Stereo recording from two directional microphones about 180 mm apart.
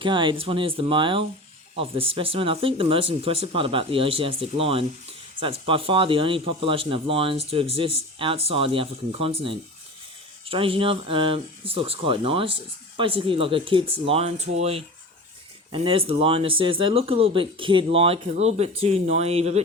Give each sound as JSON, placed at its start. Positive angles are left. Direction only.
{"t": 0.0, "sound": "speech", "side_deg": -25}